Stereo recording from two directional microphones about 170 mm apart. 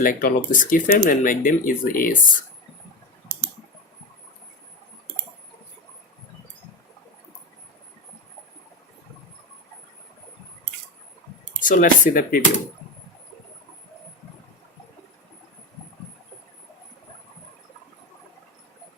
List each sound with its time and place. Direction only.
0.0 s speech: 55° left (ahead or behind)
11.6 s speech: 50° left (ahead or behind)